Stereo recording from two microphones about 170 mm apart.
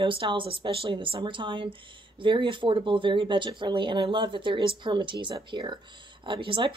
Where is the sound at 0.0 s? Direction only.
30° right (ahead or behind).